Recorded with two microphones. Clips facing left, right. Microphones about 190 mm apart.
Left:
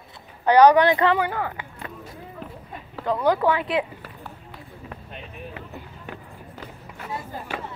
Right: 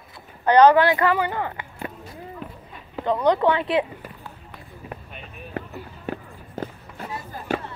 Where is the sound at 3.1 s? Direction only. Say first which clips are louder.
Right 1 dB; 5° left (ahead or behind).